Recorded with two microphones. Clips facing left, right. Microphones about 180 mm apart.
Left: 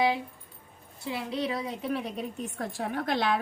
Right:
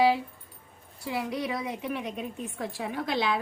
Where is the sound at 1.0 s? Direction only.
25° left (ahead or behind).